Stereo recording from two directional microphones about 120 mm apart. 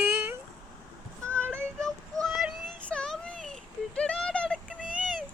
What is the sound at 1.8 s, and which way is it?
Child singing, centre (ahead or behind).